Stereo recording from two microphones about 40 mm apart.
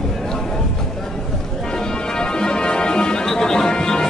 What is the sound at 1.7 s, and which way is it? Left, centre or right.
Music, centre.